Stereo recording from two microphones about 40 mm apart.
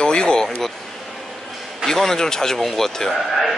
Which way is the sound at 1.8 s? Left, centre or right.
Centre.